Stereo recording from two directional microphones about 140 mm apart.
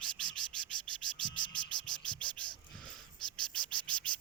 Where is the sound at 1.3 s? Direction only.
35° left (ahead or behind).